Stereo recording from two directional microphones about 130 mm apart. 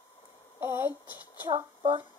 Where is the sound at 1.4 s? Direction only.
35° right (ahead or behind).